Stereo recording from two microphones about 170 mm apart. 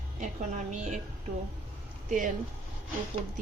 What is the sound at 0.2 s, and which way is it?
Speech, 45° right (ahead or behind).